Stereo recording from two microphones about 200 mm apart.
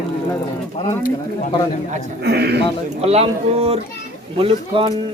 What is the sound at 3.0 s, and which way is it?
Speech, 30° right (ahead or behind).